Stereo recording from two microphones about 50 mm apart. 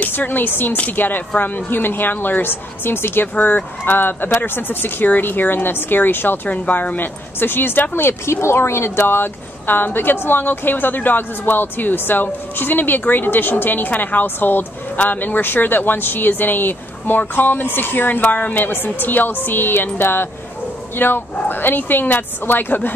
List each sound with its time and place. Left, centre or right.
0.0 s a woman's voice: left
3.3 s speech: left
6.5 s speech: left
9.0 s a woman's voice: left